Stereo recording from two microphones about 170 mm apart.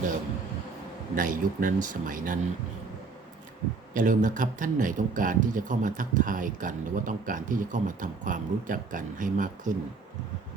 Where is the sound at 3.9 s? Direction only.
50° right (ahead or behind).